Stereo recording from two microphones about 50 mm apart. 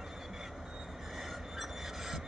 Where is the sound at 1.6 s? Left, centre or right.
Centre.